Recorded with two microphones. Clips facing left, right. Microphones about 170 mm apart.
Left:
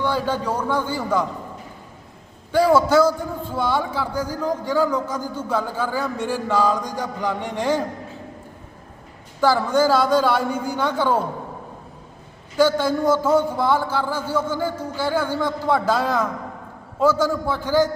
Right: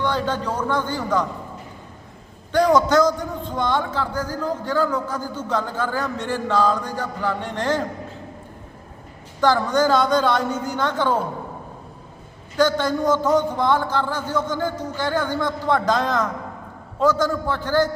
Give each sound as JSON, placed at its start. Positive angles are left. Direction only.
{"t": 0.0, "sound": "a man's voice", "side_deg": 10}
{"t": 2.5, "sound": "a man's voice", "side_deg": 5}
{"t": 9.4, "sound": "a man's voice", "side_deg": 5}
{"t": 12.5, "sound": "a man's voice", "side_deg": 10}